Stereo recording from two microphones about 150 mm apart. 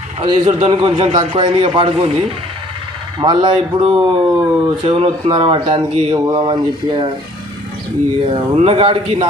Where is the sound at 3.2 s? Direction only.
30° right (ahead or behind).